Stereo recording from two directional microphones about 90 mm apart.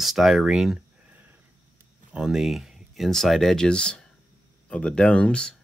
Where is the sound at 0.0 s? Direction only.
5° right (ahead or behind).